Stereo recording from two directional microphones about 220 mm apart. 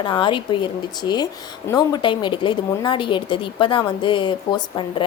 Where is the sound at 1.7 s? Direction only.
20° left (ahead or behind).